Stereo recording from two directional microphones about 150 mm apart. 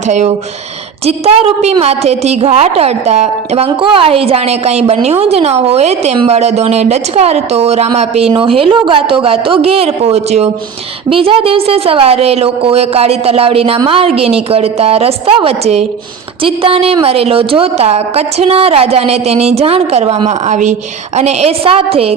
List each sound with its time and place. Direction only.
0.1 s a woman's voice: 50° right (ahead or behind)